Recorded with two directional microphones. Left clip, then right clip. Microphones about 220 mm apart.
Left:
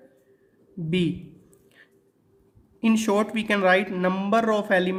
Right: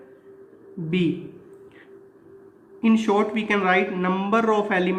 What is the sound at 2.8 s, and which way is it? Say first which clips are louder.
Speech: right 2 dB; 55° left (ahead or behind).